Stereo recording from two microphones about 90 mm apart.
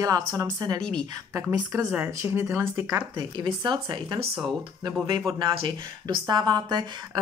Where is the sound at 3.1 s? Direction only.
65° right (ahead or behind).